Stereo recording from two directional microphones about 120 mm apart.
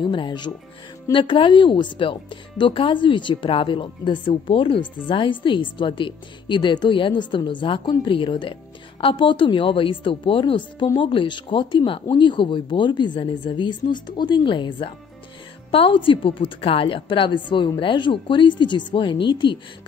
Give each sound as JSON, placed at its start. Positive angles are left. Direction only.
{"t": 0.0, "sound": "speech", "side_deg": 40}